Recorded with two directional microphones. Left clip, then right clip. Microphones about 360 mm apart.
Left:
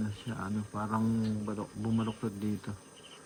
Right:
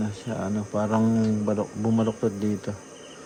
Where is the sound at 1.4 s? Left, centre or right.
Right.